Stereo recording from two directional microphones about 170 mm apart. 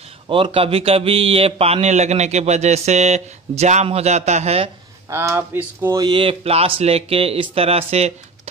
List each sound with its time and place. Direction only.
0.3 s speech: 30° right (ahead or behind)
5.1 s speech: 15° right (ahead or behind)
5.9 s speech: 30° right (ahead or behind)